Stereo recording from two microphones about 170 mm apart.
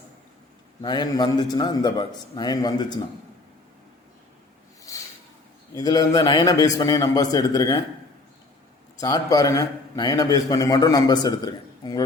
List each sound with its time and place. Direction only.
0.8 s a man's voice: 25° left (ahead or behind)
4.9 s a sound: 20° left (ahead or behind)
5.7 s a man's voice: 20° left (ahead or behind)
9.0 s a man's voice: 20° left (ahead or behind)